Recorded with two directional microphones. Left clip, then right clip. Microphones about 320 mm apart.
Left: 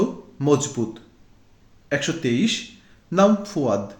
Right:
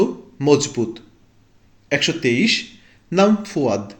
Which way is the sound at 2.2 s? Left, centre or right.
Left.